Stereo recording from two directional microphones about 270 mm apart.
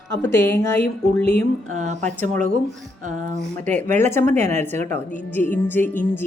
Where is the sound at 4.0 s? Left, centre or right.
Centre.